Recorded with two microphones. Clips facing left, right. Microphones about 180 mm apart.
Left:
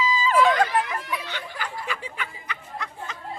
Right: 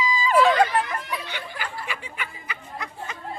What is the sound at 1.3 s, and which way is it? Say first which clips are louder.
Snicker: even; 10° right (ahead or behind).